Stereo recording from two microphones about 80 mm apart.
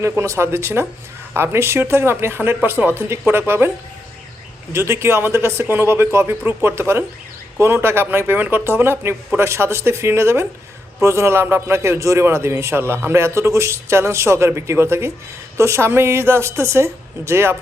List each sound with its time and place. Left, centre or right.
0.0 s a man's voice: right
4.7 s a man's voice: right